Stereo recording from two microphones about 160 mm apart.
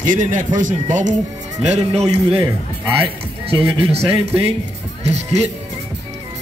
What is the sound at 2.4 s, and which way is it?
Speech, 15° right (ahead or behind).